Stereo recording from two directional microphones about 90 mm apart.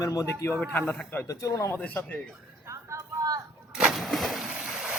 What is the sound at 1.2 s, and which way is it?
Speech, 35° left (ahead or behind).